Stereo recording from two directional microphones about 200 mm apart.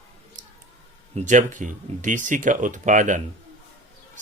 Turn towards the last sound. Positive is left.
turn(degrees=-40)  # may be behind; listen again after turning